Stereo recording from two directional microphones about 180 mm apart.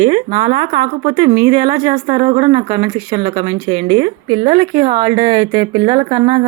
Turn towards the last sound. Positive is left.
turn(degrees=-30)  # may be behind; listen again after turning